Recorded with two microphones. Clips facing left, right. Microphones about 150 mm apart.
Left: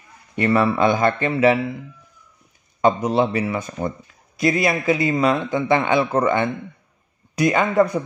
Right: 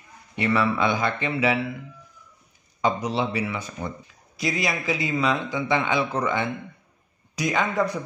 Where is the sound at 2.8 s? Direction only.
50° left (ahead or behind).